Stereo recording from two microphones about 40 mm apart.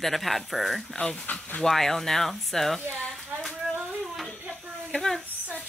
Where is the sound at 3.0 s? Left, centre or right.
Left.